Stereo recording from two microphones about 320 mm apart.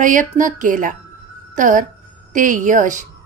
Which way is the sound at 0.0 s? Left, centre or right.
Right.